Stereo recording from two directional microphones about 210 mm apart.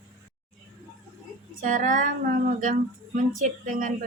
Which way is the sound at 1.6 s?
40° right (ahead or behind).